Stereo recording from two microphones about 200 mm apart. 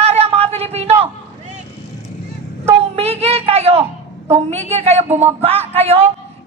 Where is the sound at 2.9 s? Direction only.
30° right (ahead or behind).